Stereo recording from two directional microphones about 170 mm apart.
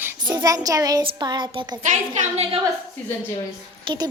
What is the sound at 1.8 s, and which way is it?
Speech, 45° right (ahead or behind).